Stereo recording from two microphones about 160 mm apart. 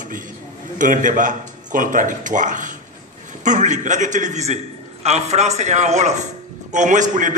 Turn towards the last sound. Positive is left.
turn(degrees=-50)  # may be behind; listen again after turning